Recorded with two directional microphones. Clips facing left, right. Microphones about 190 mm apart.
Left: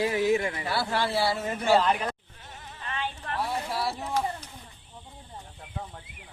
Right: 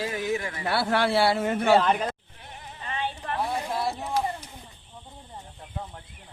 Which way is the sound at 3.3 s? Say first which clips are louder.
Right 1 dB; 15° right (ahead or behind).